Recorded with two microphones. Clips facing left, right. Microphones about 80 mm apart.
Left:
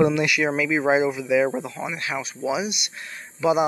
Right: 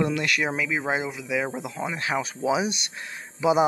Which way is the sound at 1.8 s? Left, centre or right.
Right.